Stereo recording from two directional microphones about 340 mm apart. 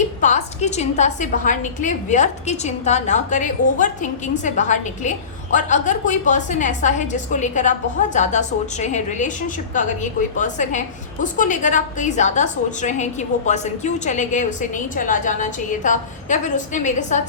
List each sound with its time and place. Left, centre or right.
0.2 s a woman's voice: left